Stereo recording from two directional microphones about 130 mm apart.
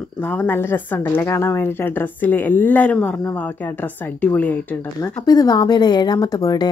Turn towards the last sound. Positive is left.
turn(degrees=30)  # may be behind; listen again after turning